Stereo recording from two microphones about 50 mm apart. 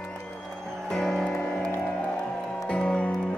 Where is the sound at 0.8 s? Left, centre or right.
Centre.